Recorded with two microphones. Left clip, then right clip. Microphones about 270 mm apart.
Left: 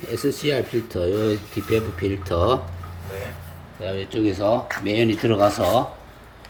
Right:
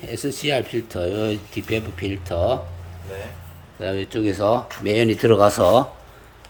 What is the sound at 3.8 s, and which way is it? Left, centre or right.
Speech, centre.